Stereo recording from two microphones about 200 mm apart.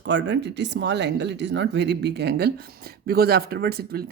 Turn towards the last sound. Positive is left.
turn(degrees=-50)  # may be behind; listen again after turning